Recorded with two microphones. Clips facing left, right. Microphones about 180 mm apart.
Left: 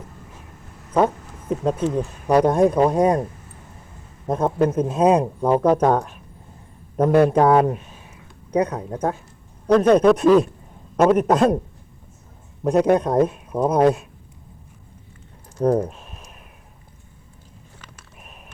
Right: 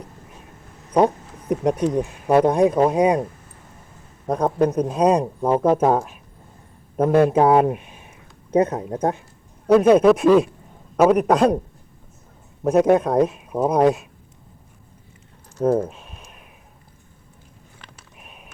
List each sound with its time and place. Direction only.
0.9 s speech: 15° right (ahead or behind)
2.3 s speech: centre (ahead or behind)
4.3 s speech: centre (ahead or behind)
7.3 s speech: 10° right (ahead or behind)
9.6 s speech: 5° right (ahead or behind)
12.6 s speech: centre (ahead or behind)
15.9 s a sound: centre (ahead or behind)